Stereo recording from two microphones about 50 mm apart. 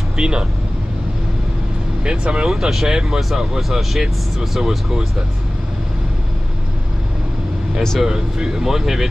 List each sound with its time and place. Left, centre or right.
0.2 s speech: centre
2.0 s speech: right
2.4 s speech: centre
8.0 s speech: centre